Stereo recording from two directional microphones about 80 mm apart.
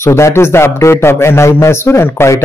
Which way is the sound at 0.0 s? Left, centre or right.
Left.